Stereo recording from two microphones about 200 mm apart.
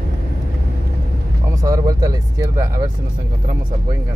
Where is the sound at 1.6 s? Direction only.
15° right (ahead or behind).